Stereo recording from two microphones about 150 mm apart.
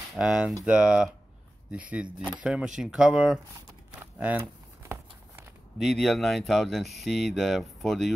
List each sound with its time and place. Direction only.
0.1 s speech: 5° right (ahead or behind)
4.0 s crumpling: 15° right (ahead or behind)
5.8 s speech: centre (ahead or behind)